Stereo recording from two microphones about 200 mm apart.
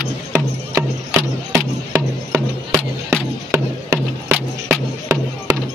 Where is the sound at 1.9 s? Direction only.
15° right (ahead or behind).